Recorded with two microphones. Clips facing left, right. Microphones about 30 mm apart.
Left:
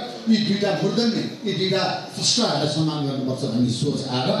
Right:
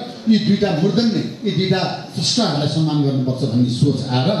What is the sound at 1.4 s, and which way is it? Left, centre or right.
Speech, centre.